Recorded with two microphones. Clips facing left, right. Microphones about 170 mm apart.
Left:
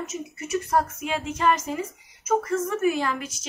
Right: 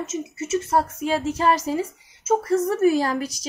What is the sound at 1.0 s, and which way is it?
A woman's voice, 35° right (ahead or behind).